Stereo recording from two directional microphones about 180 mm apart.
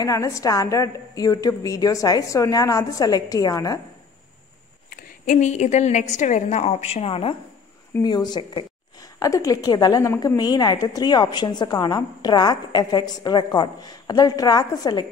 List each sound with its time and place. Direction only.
0.0 s a woman's voice: 15° left (ahead or behind)
4.8 s a woman's voice: 50° left (ahead or behind); by 15.0 s 20° left (ahead or behind)